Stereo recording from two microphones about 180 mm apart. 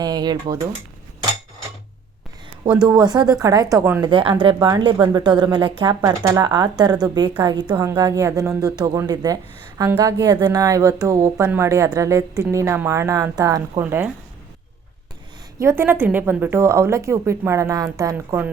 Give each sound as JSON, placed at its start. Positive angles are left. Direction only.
{"t": 0.0, "sound": "a woman's voice", "side_deg": -20}
{"t": 2.6, "sound": "speech", "side_deg": -5}
{"t": 2.9, "sound": "a woman's voice", "side_deg": -25}
{"t": 15.5, "sound": "a woman's voice", "side_deg": -15}